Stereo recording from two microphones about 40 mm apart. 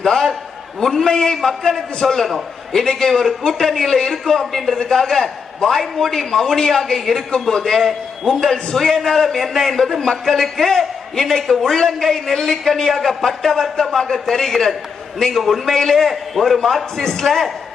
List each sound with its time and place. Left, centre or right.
0.0 s a sound: centre
0.8 s a man's voice: centre
7.3 s a man's voice: centre
7.8 s a man's voice: centre
8.3 s a man's voice: centre